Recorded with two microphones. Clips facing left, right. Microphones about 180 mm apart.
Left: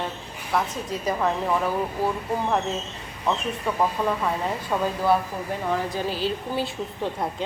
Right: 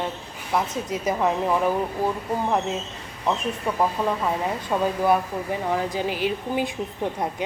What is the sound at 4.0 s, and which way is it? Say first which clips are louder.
Speech: right 1 dB; 20° right (ahead or behind).